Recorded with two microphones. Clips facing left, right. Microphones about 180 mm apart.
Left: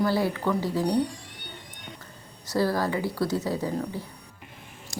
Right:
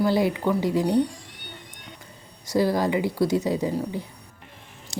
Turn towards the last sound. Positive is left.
turn(degrees=-20)  # may be behind; listen again after turning